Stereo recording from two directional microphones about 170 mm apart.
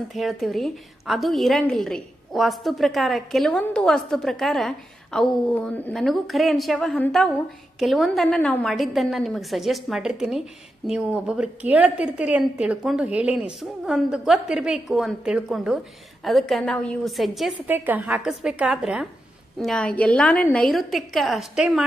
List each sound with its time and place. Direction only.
0.1 s a woman's voice: centre (ahead or behind)